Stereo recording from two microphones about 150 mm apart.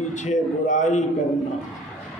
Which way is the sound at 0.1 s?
55° left (ahead or behind).